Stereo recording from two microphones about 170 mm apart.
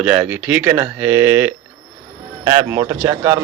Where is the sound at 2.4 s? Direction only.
20° right (ahead or behind).